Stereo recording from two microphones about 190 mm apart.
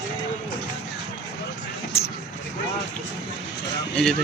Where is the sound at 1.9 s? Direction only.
10° left (ahead or behind).